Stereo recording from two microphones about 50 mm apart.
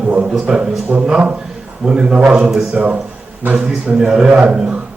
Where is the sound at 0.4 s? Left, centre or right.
Centre.